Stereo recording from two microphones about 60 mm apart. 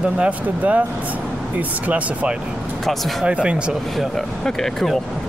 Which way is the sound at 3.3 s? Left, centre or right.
Centre.